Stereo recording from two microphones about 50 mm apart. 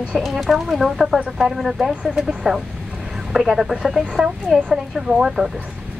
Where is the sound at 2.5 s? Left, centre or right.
Centre.